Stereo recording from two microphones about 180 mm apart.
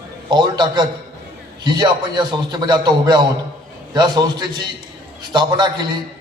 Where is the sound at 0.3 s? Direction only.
25° right (ahead or behind).